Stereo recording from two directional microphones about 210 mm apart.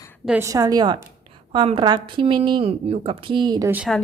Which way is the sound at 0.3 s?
10° right (ahead or behind).